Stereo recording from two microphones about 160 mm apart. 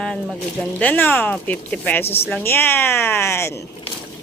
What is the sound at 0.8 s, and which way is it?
Speech, 10° left (ahead or behind).